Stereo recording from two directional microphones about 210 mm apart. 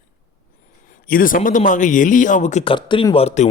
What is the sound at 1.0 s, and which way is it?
A man's voice, 40° left (ahead or behind).